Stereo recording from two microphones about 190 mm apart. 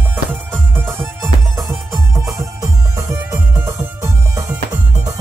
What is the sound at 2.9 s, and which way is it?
Music, 15° right (ahead or behind).